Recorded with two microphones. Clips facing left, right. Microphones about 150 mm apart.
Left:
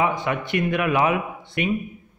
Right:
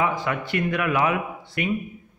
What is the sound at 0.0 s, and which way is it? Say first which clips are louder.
A man's voice: left 2 dB; 20° left (ahead or behind).